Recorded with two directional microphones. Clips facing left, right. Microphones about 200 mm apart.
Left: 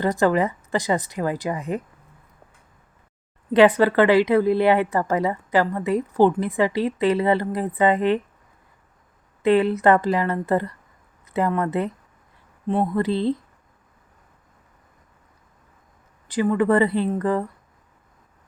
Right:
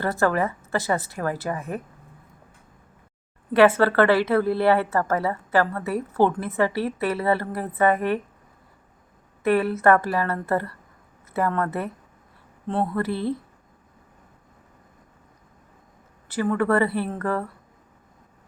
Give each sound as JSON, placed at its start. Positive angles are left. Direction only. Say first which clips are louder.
{"t": 0.0, "sound": "a woman's voice", "louder": "left 3 dB", "side_deg": 15}
{"t": 3.5, "sound": "a woman's voice", "louder": "left 2 dB", "side_deg": 15}
{"t": 9.4, "sound": "a woman's voice", "louder": "left 3 dB", "side_deg": 20}
{"t": 16.3, "sound": "a woman's voice", "louder": "left 3 dB", "side_deg": 15}